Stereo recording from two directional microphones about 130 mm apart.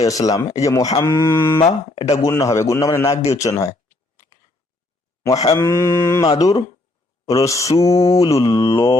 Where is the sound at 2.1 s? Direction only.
25° left (ahead or behind).